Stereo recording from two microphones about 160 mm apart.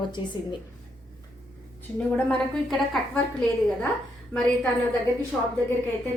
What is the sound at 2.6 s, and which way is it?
Speech, centre (ahead or behind).